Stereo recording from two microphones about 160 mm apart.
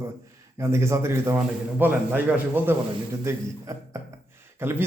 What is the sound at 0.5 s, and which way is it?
A man's voice, 15° right (ahead or behind).